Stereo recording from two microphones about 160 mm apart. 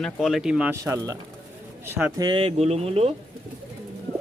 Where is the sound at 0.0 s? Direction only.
Centre (ahead or behind).